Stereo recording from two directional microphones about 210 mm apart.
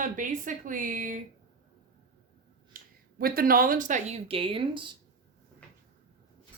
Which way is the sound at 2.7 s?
40° right (ahead or behind).